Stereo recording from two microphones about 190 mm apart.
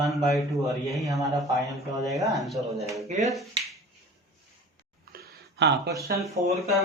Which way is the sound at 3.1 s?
40° right (ahead or behind).